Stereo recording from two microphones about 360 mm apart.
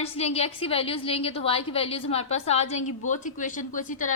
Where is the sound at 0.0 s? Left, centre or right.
Centre.